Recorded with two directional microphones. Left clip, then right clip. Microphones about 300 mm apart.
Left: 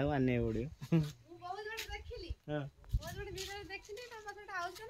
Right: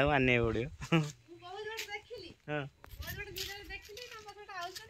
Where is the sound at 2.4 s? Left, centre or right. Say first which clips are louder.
Right 3 dB; centre.